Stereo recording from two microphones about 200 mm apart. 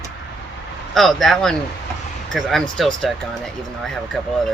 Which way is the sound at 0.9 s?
Centre (ahead or behind).